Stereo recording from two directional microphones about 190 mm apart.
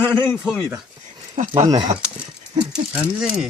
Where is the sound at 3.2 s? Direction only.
5° right (ahead or behind).